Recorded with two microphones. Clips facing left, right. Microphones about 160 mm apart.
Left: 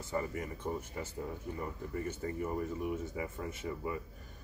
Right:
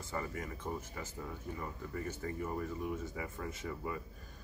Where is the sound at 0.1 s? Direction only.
15° left (ahead or behind).